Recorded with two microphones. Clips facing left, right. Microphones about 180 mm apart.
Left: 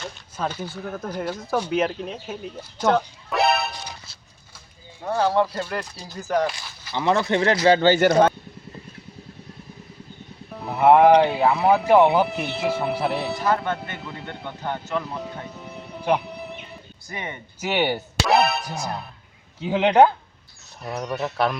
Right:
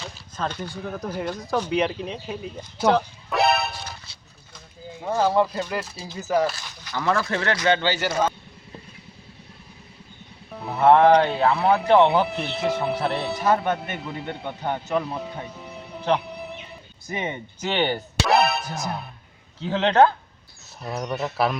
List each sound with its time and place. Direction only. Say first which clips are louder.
0.0 s speech: left 1 dB; 5° left (ahead or behind)
5.0 s speech: even; centre (ahead or behind)
6.9 s speech: left 3 dB; 20° left (ahead or behind)
7.8 s speech: left 8 dB; 50° left (ahead or behind)
10.5 s speech: left 1 dB; centre (ahead or behind)
14.3 s speech: right 2 dB; 15° right (ahead or behind)
15.5 s music: left 1 dB; centre (ahead or behind)
16.0 s music: left 1 dB; 10° left (ahead or behind)
16.2 s music: even; centre (ahead or behind)
17.1 s speech: right 5 dB; 20° right (ahead or behind)
17.6 s speech: left 1 dB; 10° left (ahead or behind)
19.5 s speech: left 2 dB; 15° left (ahead or behind)
20.8 s speech: even; centre (ahead or behind)